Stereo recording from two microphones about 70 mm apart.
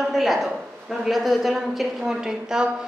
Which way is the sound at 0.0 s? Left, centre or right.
Centre.